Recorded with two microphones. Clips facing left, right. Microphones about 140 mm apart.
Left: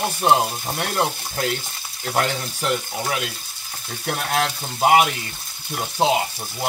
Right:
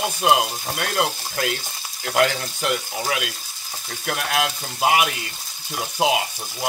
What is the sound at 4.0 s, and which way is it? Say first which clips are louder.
Frying: left 1 dB; 35° left (ahead or behind).